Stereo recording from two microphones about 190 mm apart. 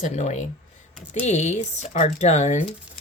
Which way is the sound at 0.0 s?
40° left (ahead or behind).